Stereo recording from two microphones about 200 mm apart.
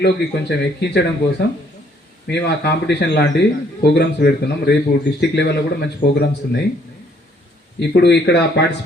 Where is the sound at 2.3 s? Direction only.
55° left (ahead or behind).